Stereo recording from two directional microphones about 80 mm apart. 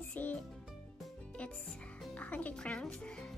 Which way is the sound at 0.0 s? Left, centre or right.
Left.